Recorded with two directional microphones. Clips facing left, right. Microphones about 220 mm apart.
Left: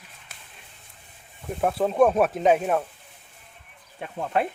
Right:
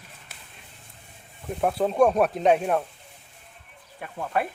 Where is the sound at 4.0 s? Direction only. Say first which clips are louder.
Left 2 dB; 20° left (ahead or behind).